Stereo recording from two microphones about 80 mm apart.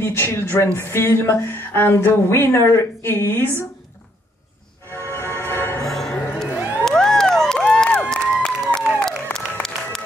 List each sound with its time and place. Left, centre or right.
0.0 s speech: left
5.1 s train: left
5.8 s music: centre
6.5 s crowd: right
6.8 s crowd: centre
9.0 s applause: centre